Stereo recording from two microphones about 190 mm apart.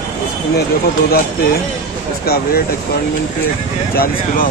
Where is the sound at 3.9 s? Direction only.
50° left (ahead or behind).